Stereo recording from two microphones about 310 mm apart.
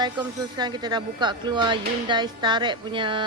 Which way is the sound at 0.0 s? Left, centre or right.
Centre.